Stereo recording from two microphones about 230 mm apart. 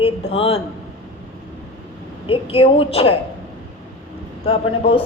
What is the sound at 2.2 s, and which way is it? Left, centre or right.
Speech, left.